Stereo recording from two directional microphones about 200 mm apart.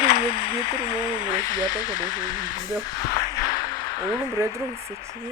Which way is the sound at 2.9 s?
15° left (ahead or behind).